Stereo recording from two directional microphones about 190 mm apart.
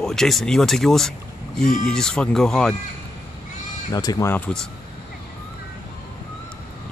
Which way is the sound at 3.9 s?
20° left (ahead or behind).